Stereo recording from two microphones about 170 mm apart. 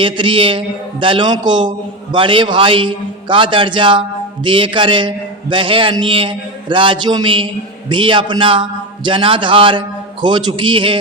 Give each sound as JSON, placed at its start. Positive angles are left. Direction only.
{"t": 0.0, "sound": "a man's voice", "side_deg": -30}